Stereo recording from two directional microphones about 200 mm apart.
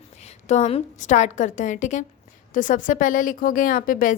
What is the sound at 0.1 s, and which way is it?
A woman's voice, 35° left (ahead or behind).